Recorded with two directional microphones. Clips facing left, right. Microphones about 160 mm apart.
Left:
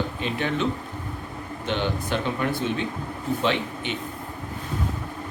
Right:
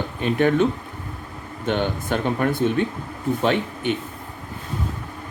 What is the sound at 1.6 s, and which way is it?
Speech, 50° right (ahead or behind).